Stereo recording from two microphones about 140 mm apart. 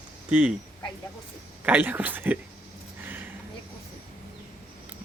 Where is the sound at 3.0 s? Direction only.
15° right (ahead or behind).